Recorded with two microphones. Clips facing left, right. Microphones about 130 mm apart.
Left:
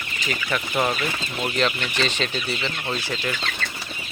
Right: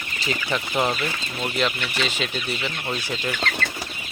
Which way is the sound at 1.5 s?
5° right (ahead or behind).